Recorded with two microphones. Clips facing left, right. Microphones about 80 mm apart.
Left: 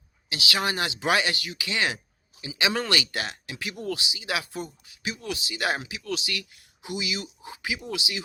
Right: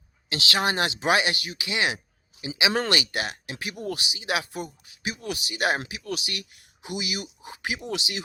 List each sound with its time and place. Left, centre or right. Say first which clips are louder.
0.3 s speech: right 2 dB; right
0.6 s speech: right 3 dB; right